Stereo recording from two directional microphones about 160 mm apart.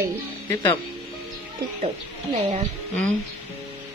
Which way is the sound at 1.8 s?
40° right (ahead or behind).